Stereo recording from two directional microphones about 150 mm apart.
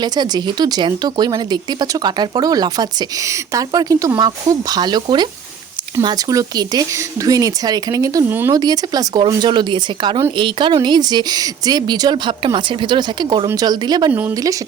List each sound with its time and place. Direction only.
0.0 s speech: 30° right (ahead or behind)
8.5 s speech: 25° right (ahead or behind)